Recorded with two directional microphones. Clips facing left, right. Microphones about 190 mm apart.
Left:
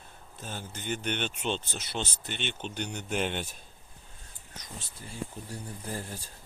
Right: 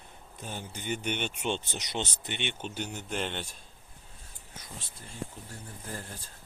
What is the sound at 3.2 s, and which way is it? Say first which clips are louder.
Speech: left 4 dB; 10° left (ahead or behind).